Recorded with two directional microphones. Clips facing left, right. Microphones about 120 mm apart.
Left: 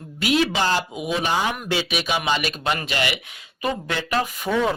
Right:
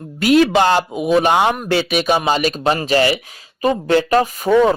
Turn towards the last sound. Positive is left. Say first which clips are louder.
# right 9 dB
turn(degrees=-40)  # may be behind; listen again after turning